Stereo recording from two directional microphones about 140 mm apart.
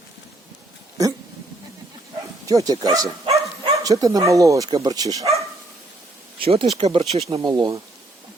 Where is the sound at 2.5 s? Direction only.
25° right (ahead or behind).